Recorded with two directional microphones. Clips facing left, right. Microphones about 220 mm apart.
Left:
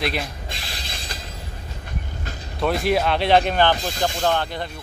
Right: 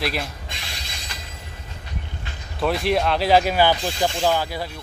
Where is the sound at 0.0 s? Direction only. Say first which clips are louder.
Left 1 dB; centre (ahead or behind).